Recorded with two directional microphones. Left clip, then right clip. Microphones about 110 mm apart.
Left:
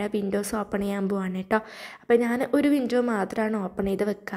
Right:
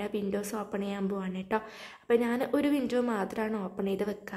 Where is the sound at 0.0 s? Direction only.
40° left (ahead or behind).